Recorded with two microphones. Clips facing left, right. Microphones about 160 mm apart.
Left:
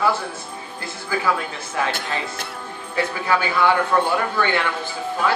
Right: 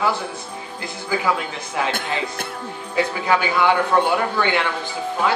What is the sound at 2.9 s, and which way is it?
A man's voice, 20° right (ahead or behind).